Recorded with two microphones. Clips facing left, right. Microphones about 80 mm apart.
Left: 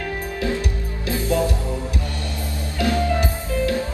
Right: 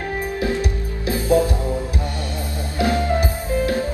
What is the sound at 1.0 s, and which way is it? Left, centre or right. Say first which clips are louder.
Music: right 5 dB; right.